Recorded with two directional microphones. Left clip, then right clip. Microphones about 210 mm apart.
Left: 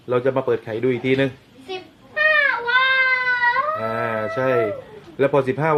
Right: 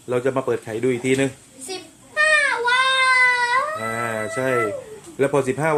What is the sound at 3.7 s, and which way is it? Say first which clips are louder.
Chicken: left 2 dB; 5° right (ahead or behind).